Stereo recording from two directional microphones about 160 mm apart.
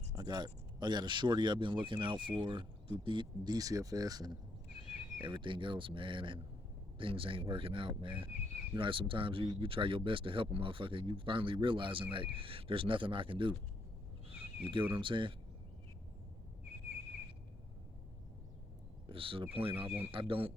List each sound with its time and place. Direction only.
0.2 s speech: 25° right (ahead or behind)
14.6 s speech: 30° right (ahead or behind)
19.0 s speech: 35° right (ahead or behind)